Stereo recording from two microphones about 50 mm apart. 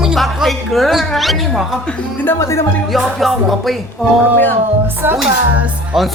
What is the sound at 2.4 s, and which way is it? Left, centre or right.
Speech, left.